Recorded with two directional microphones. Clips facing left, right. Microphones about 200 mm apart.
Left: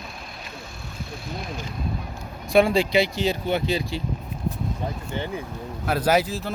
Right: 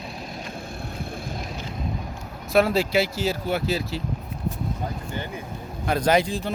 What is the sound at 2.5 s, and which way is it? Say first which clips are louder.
Speech: left 2 dB; 5° right (ahead or behind).